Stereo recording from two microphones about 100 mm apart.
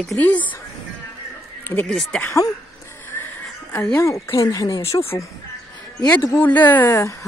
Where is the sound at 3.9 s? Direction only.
25° left (ahead or behind).